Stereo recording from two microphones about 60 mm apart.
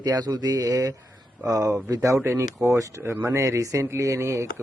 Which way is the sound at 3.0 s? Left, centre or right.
Right.